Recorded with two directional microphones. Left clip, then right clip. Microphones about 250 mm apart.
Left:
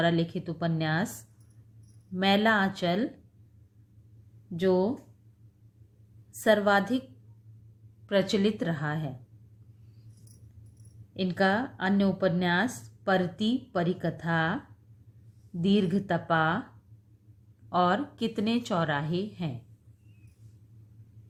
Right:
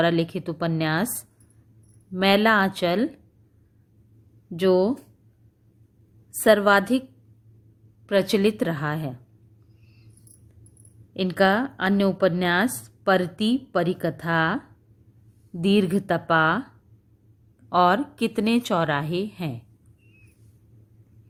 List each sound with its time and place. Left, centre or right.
0.0 s a woman's voice: right
2.1 s a woman's voice: right
4.5 s a woman's voice: right
6.4 s a woman's voice: right
8.0 s a woman's voice: right
11.1 s a woman's voice: right
15.6 s a woman's voice: right
17.7 s a woman's voice: right